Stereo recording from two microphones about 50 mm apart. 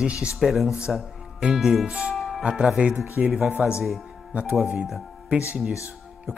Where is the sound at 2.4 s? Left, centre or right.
Centre.